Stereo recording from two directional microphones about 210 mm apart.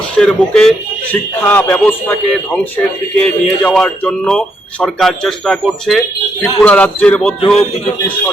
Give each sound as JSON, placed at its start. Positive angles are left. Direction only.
{"t": 0.2, "sound": "a man's voice", "side_deg": 5}